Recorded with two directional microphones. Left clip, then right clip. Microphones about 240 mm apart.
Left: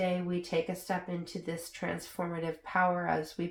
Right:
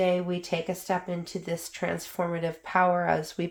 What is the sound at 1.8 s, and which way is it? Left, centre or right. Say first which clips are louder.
Speech: right 6 dB; right.